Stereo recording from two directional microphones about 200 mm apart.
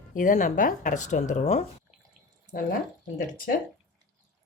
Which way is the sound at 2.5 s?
45° left (ahead or behind).